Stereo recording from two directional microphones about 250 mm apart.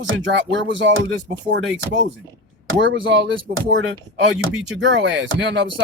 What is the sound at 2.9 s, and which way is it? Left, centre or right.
Speech, right.